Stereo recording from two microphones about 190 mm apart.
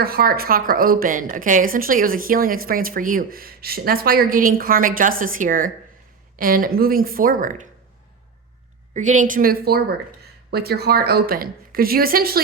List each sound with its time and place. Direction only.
0.0 s a woman's voice: 50° right (ahead or behind)
8.9 s a woman's voice: 40° right (ahead or behind)